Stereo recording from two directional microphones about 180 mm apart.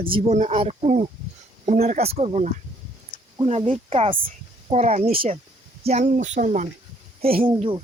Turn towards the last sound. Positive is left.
turn(degrees=-30)  # may be behind; listen again after turning